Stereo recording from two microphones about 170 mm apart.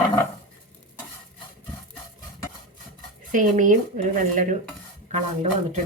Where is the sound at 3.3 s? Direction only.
50° right (ahead or behind).